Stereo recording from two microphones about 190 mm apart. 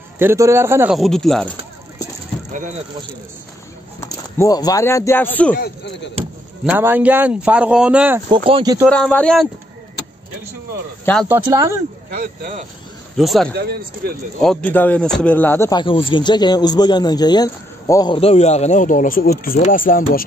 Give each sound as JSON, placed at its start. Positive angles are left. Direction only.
{"t": 0.2, "sound": "speech", "side_deg": -15}
{"t": 0.9, "sound": "speech", "side_deg": 0}
{"t": 4.0, "sound": "speech", "side_deg": 15}
{"t": 5.6, "sound": "speech", "side_deg": 65}
{"t": 6.6, "sound": "speech", "side_deg": -10}
{"t": 8.5, "sound": "speech", "side_deg": -25}
{"t": 8.8, "sound": "speech", "side_deg": 5}
{"t": 11.4, "sound": "speech", "side_deg": -15}
{"t": 12.2, "sound": "speech", "side_deg": -50}
{"t": 13.2, "sound": "speech", "side_deg": 0}
{"t": 13.6, "sound": "speech", "side_deg": -55}
{"t": 14.4, "sound": "speech", "side_deg": 5}
{"t": 15.7, "sound": "speech", "side_deg": 25}